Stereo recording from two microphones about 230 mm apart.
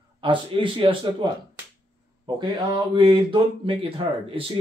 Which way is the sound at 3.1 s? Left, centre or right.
Right.